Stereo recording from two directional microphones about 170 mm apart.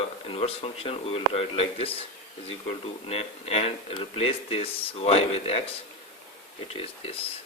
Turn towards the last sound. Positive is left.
turn(degrees=35)  # may be behind; listen again after turning